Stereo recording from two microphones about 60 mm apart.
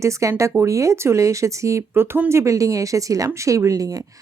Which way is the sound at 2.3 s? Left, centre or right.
Right.